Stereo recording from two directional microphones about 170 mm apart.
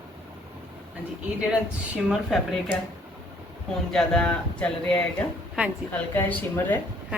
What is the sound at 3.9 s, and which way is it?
Speech, 5° left (ahead or behind).